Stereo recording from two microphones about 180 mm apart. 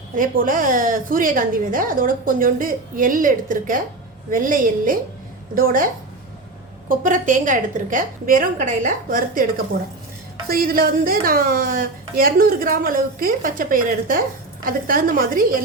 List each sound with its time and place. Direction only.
0.2 s a woman's voice: 50° right (ahead or behind)